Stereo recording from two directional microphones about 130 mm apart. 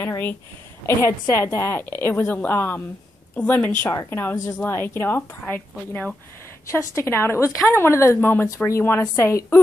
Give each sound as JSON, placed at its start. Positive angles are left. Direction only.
{"t": 0.0, "sound": "a woman's voice", "side_deg": 15}